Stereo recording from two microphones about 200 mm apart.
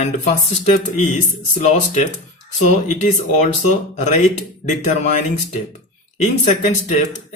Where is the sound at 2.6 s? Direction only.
35° left (ahead or behind).